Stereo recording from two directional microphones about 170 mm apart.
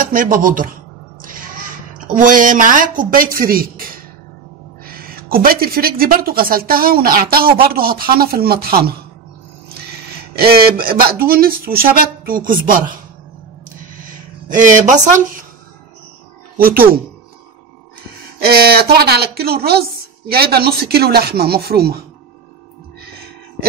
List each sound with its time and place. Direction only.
0.0 s speech: 55° right (ahead or behind)
2.1 s a woman's voice: 50° right (ahead or behind)
10.3 s a woman's voice: 65° right (ahead or behind)
14.0 s speech: 50° right (ahead or behind)
16.5 s a woman's voice: 60° right (ahead or behind)
18.4 s speech: 65° right (ahead or behind)